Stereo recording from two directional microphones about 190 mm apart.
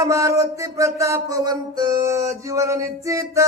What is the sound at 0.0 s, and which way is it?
Music, 15° right (ahead or behind).